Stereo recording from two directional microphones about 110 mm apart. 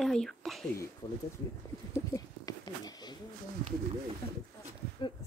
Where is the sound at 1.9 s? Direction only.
30° left (ahead or behind).